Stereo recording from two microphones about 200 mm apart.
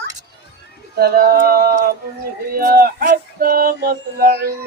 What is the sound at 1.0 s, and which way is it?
Child singing, 50° right (ahead or behind).